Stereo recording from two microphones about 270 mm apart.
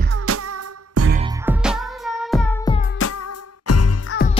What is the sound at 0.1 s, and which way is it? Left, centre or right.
Music, right.